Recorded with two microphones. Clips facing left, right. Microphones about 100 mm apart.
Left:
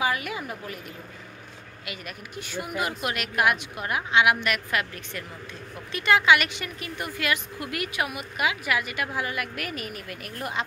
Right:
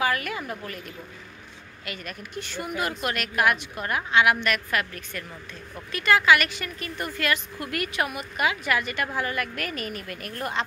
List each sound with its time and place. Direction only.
0.0 s a woman's voice: 10° left (ahead or behind)
1.9 s a woman's voice: 10° left (ahead or behind)